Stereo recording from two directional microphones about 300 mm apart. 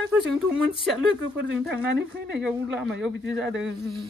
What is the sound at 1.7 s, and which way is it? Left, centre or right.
Speech, right.